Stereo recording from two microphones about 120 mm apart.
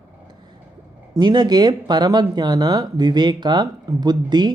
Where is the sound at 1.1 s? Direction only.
35° right (ahead or behind).